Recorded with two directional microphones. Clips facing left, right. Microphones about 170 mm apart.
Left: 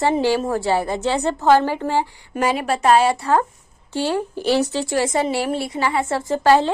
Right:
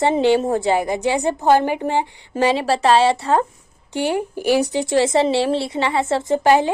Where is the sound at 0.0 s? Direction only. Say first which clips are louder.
Right 3 dB; 20° right (ahead or behind).